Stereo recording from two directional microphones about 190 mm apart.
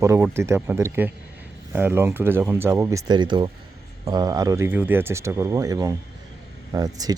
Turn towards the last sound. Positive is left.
turn(degrees=-20)  # may be behind; listen again after turning